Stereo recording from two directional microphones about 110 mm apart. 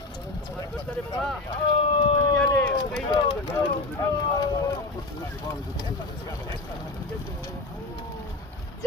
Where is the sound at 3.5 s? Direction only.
30° left (ahead or behind).